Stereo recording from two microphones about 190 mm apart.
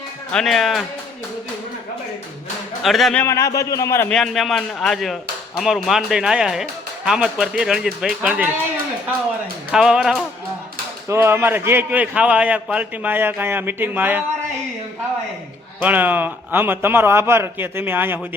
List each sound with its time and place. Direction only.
0.3 s speech: 5° left (ahead or behind)
2.8 s speech: centre (ahead or behind)
3.2 s a man's voice: 15° left (ahead or behind)
4.2 s speech: centre (ahead or behind)
9.7 s speech: 5° right (ahead or behind)
11.1 s a man's voice: 15° right (ahead or behind)
15.8 s a man's voice: 10° right (ahead or behind)